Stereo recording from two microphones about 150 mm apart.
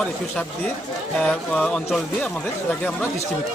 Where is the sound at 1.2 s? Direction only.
5° left (ahead or behind).